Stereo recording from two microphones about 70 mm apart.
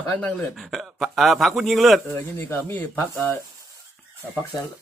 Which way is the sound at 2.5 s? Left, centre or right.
Left.